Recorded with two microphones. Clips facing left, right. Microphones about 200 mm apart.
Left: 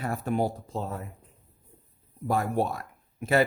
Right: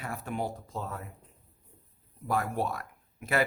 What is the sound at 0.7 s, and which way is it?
Speech, 30° left (ahead or behind).